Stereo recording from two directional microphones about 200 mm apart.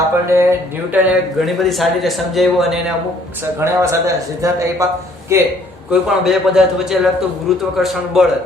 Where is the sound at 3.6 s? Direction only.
10° right (ahead or behind).